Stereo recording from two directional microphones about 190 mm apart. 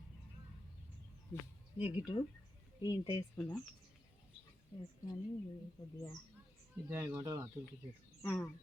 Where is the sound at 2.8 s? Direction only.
20° left (ahead or behind).